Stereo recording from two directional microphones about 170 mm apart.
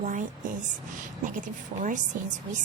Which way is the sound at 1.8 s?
50° right (ahead or behind).